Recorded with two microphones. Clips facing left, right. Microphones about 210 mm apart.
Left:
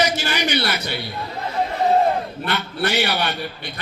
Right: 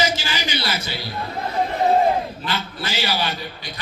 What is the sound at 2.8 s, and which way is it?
Speech, 65° left (ahead or behind).